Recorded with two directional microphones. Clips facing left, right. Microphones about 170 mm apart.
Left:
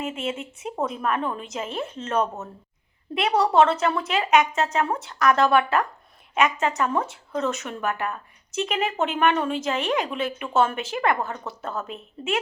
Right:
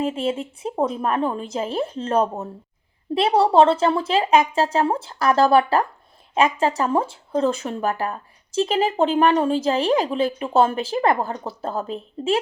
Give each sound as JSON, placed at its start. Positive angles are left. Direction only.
{"t": 0.0, "sound": "speech", "side_deg": -30}